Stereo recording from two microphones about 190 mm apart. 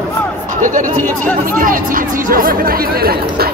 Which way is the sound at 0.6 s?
45° right (ahead or behind).